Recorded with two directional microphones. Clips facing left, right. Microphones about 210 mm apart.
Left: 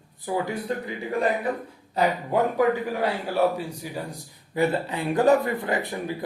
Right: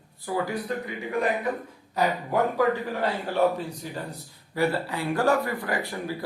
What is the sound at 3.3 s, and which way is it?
Speech, 10° left (ahead or behind).